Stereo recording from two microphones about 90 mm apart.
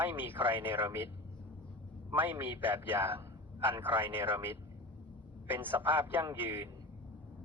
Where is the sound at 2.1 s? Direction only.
20° right (ahead or behind).